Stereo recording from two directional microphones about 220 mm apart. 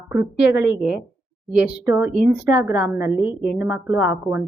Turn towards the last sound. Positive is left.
turn(degrees=-10)  # may be behind; listen again after turning